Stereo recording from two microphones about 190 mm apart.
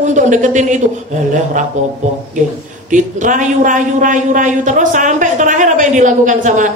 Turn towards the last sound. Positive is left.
turn(degrees=-40)  # may be behind; listen again after turning